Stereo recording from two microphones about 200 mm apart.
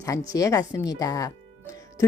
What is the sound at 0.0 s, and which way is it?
Speech, 15° left (ahead or behind).